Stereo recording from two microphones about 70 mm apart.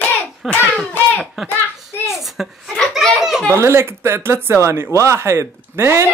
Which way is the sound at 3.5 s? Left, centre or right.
Right.